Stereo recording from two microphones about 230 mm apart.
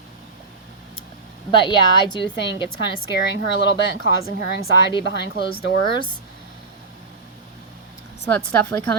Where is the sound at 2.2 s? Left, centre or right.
Left.